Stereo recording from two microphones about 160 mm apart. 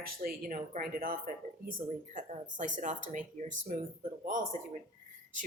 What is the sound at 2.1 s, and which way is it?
Speech, 50° right (ahead or behind).